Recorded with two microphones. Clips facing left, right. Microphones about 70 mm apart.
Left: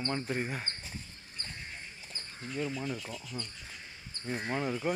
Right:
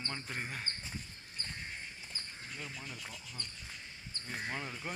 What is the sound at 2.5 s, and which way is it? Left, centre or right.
Speech, left.